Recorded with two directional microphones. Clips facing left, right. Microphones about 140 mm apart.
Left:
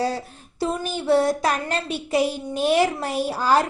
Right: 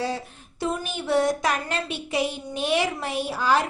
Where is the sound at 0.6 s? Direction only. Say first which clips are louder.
Left 3 dB; 35° left (ahead or behind).